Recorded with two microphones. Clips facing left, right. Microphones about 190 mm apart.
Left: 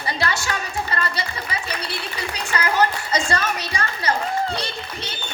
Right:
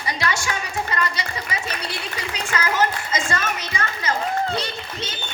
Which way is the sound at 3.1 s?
35° left (ahead or behind).